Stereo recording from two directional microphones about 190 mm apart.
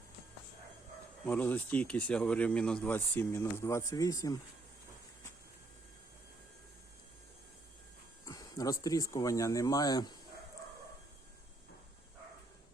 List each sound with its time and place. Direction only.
1.2 s speech: 10° left (ahead or behind)
8.2 s speech: 20° left (ahead or behind)